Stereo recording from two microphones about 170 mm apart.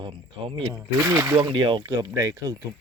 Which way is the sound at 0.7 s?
15° right (ahead or behind).